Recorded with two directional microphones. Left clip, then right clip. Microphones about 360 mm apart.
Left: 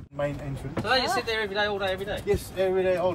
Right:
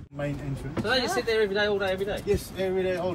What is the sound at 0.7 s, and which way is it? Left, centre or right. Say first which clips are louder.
A man's voice: left 1 dB; centre.